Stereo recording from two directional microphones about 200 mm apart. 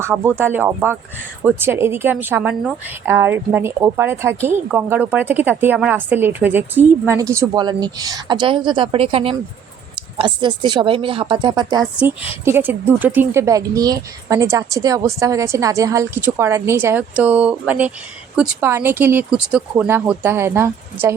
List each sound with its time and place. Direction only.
0.0 s a woman's voice: 10° right (ahead or behind)